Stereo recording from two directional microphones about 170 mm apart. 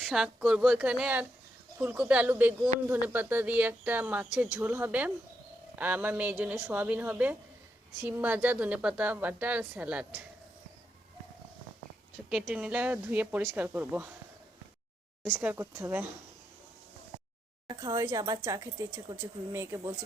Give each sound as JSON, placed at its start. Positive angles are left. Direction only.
{"t": 0.0, "sound": "a woman's voice", "side_deg": -5}
{"t": 12.3, "sound": "a woman's voice", "side_deg": -10}
{"t": 15.4, "sound": "a woman's voice", "side_deg": -10}
{"t": 17.7, "sound": "a woman's voice", "side_deg": -25}